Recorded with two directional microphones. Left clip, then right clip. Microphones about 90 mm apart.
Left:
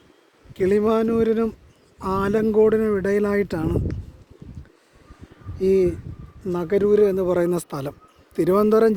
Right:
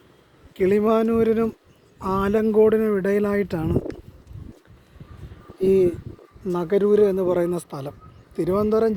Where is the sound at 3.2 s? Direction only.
40° left (ahead or behind).